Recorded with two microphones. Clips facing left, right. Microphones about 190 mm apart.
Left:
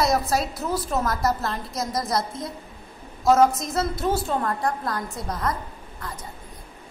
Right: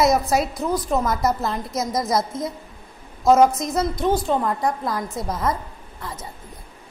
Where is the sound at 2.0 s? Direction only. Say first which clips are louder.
Right 4 dB; centre (ahead or behind).